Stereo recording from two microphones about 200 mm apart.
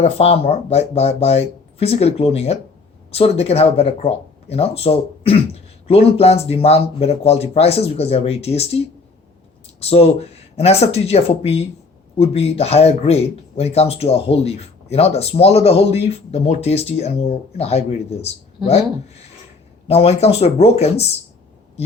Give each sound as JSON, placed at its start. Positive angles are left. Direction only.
{"t": 0.0, "sound": "speech", "side_deg": 30}
{"t": 9.8, "sound": "speech", "side_deg": 30}